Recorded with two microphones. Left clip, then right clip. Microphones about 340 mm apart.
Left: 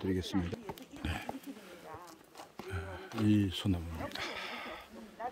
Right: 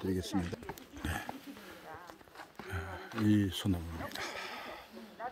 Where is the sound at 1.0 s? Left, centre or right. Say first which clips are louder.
Right 2 dB; centre.